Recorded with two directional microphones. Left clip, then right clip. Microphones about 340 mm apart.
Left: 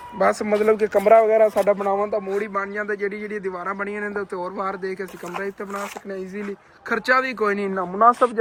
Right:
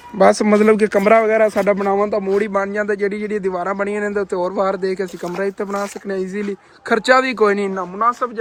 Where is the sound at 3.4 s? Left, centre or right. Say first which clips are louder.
Right 8 dB; centre.